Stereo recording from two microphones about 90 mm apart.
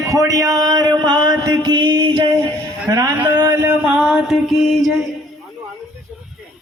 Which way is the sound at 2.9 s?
45° right (ahead or behind).